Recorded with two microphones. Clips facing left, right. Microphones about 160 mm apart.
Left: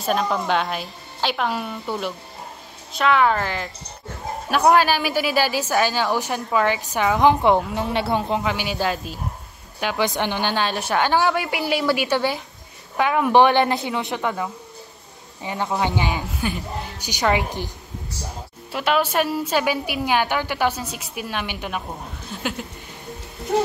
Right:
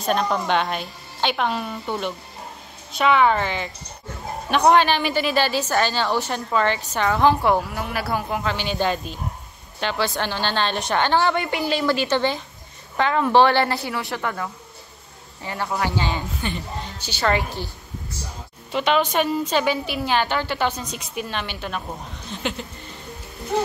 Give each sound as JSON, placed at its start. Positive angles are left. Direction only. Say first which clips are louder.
{"t": 0.0, "sound": "a woman's voice", "louder": "even", "side_deg": 0}
{"t": 18.7, "sound": "a woman's voice", "louder": "right 1 dB", "side_deg": 5}